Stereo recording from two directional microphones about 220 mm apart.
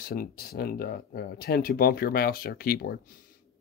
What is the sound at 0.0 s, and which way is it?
Speech, 40° left (ahead or behind).